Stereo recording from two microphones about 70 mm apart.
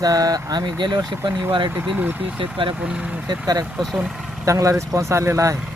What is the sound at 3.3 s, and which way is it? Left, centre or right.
Speech, right.